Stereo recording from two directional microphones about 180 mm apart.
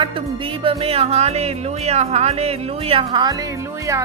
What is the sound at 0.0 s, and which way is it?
Music, 30° right (ahead or behind).